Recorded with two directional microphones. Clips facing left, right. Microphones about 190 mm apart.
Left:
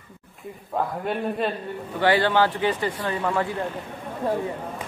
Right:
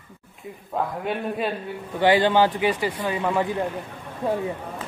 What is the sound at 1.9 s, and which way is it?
Speech, 15° right (ahead or behind).